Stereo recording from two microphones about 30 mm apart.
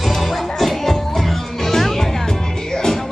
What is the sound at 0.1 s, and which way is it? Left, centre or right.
Music, centre.